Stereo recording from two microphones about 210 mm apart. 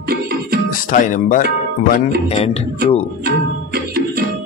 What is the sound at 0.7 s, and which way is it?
Speech, 40° left (ahead or behind).